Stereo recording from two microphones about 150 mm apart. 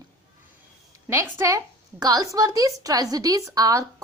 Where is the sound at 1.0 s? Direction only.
15° right (ahead or behind).